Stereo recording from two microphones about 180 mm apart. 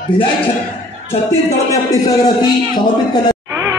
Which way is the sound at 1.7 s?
20° left (ahead or behind).